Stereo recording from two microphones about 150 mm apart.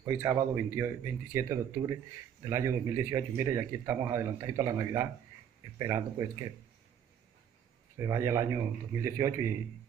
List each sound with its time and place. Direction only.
0.0 s speech: 20° right (ahead or behind)
8.0 s speech: 20° right (ahead or behind)